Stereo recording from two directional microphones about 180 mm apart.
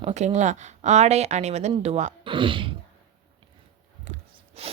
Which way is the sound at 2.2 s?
30° right (ahead or behind).